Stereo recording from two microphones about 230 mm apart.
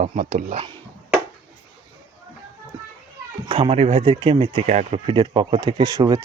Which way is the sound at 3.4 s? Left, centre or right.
Right.